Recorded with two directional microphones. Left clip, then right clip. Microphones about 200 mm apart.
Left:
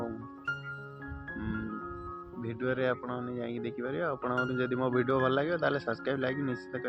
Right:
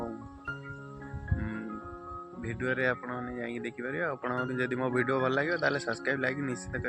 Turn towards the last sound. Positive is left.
turn(degrees=-15)  # may be behind; listen again after turning